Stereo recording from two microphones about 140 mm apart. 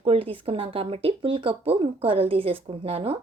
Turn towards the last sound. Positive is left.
turn(degrees=-45)  # may be behind; listen again after turning